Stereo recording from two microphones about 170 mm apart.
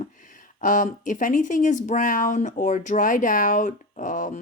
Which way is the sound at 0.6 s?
50° left (ahead or behind).